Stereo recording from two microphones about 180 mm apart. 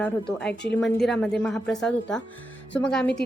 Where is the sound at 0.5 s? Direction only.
70° left (ahead or behind).